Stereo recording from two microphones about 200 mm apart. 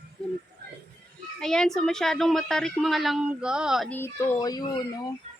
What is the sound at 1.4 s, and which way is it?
A woman's voice, 5° left (ahead or behind).